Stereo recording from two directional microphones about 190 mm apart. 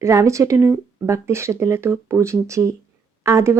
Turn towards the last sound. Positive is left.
turn(degrees=-15)  # may be behind; listen again after turning